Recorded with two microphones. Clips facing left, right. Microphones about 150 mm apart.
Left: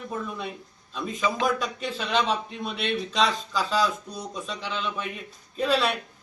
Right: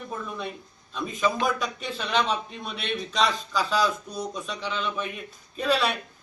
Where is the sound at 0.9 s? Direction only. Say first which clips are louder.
Right 1 dB; centre (ahead or behind).